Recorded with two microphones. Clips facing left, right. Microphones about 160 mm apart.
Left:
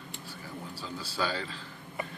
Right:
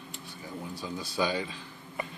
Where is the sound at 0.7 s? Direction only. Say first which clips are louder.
Right 3 dB; 15° right (ahead or behind).